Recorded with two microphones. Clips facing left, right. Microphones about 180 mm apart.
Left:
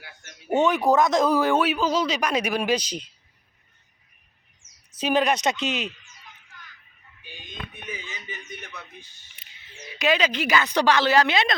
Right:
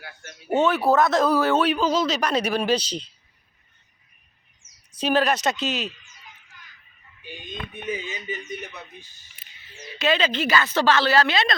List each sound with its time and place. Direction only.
0.5 s speech: 15° left (ahead or behind)
4.9 s speech: 15° left (ahead or behind)
7.9 s a sound: 20° right (ahead or behind)
8.4 s speech: 35° right (ahead or behind)
10.0 s speech: 10° left (ahead or behind)